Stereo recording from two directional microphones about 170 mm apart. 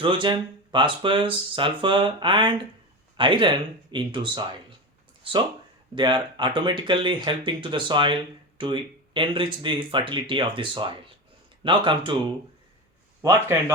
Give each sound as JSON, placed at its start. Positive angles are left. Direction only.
{"t": 0.0, "sound": "speech", "side_deg": -30}
{"t": 5.9, "sound": "speech", "side_deg": -25}
{"t": 13.2, "sound": "a man's voice", "side_deg": -15}